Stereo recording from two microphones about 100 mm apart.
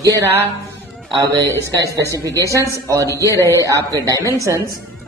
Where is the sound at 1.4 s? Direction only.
25° left (ahead or behind).